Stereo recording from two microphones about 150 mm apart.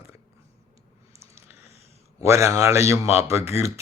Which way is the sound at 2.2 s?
20° right (ahead or behind).